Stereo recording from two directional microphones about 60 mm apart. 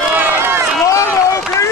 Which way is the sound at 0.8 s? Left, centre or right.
Left.